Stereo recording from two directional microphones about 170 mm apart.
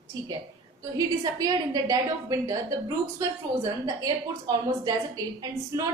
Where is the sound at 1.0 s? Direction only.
20° right (ahead or behind).